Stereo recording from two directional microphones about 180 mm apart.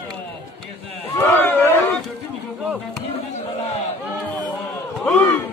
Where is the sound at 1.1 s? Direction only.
10° left (ahead or behind).